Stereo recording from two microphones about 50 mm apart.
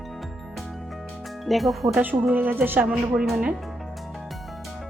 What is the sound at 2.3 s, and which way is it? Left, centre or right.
Speech, right.